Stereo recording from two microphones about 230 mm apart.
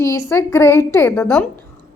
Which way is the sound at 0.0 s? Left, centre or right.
Centre.